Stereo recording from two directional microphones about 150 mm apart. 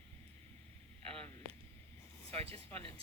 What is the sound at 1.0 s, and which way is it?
Speech, 40° right (ahead or behind).